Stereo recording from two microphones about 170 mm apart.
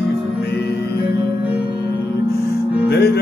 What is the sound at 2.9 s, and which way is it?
Music, 70° left (ahead or behind).